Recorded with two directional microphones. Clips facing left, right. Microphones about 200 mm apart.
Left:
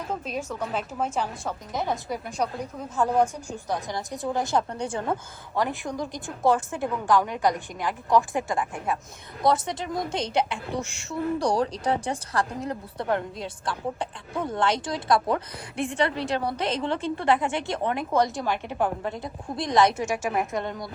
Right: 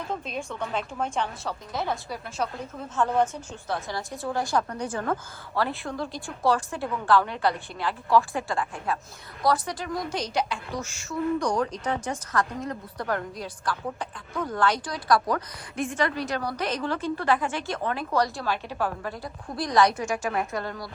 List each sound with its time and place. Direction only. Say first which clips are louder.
0.1 s a woman's voice: left 4 dB; 5° left (ahead or behind)
1.5 s a woman's voice: left 1 dB; 20° left (ahead or behind)
5.5 s a woman's voice: left 1 dB; 15° left (ahead or behind)
20.0 s a woman's voice: left 1 dB; 5° left (ahead or behind)
20.6 s speech: left 2 dB; 20° left (ahead or behind)